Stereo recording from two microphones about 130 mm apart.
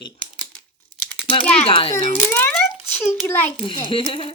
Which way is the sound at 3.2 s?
15° left (ahead or behind).